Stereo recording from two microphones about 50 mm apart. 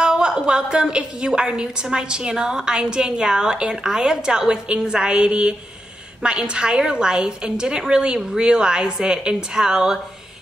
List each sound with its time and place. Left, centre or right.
0.0 s a woman's voice: centre